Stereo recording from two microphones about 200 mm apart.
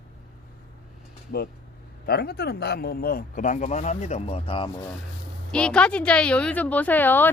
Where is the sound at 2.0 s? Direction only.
50° left (ahead or behind); by 4.7 s 25° left (ahead or behind).